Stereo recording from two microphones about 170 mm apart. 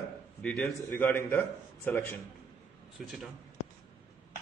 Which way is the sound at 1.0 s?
15° left (ahead or behind).